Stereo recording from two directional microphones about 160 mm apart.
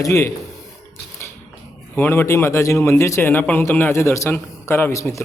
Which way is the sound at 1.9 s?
15° left (ahead or behind).